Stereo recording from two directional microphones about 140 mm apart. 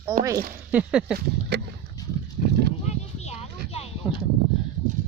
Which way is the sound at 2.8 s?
50° left (ahead or behind).